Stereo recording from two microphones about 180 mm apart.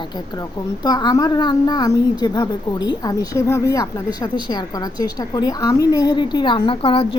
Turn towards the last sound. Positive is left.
turn(degrees=30)  # may be behind; listen again after turning